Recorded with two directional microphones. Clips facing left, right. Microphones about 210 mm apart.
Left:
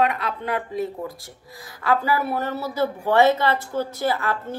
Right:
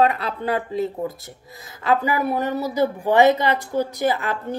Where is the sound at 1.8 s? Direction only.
20° right (ahead or behind).